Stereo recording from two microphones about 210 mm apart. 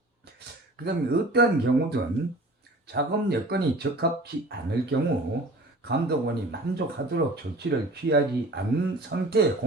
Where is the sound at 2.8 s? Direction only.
50° right (ahead or behind).